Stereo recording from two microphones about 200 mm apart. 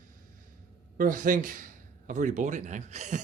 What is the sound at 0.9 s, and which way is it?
A man's voice, 40° right (ahead or behind).